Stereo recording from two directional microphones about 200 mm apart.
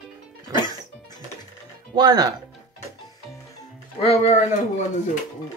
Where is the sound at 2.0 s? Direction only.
20° right (ahead or behind).